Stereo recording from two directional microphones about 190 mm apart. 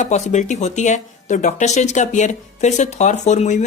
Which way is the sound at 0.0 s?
35° left (ahead or behind).